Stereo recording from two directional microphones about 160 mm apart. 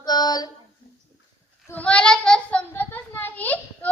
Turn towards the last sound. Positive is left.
turn(degrees=10)  # may be behind; listen again after turning